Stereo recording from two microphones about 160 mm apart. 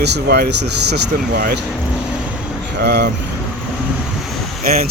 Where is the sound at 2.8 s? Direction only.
90° right.